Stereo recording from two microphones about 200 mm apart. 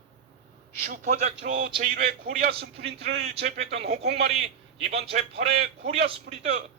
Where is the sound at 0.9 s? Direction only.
35° right (ahead or behind).